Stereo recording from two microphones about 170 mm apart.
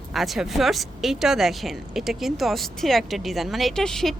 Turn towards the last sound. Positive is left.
turn(degrees=0)  # may be behind; listen again after turning